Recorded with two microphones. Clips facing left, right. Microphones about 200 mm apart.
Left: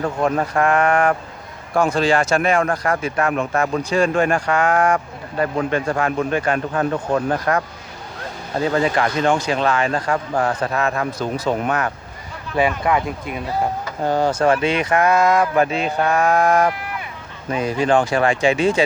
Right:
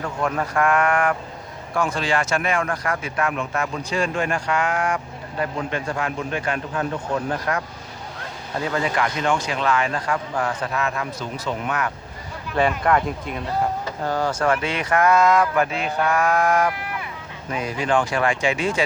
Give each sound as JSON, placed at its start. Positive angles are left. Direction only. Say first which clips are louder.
{"t": 0.0, "sound": "a man's voice", "louder": "left 5 dB", "side_deg": 35}
{"t": 8.5, "sound": "a man's voice", "louder": "left 5 dB", "side_deg": 30}
{"t": 12.5, "sound": "speech", "louder": "left 1 dB", "side_deg": 5}
{"t": 14.0, "sound": "speech", "louder": "left 5 dB", "side_deg": 20}